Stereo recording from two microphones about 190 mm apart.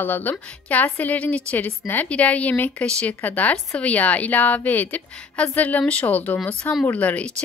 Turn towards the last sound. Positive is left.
turn(degrees=5)  # may be behind; listen again after turning